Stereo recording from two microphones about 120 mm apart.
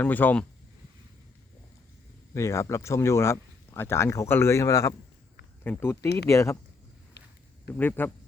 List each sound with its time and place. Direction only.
0.0 s speech: 15° left (ahead or behind)
2.3 s speech: 25° left (ahead or behind)
7.7 s speech: 15° left (ahead or behind)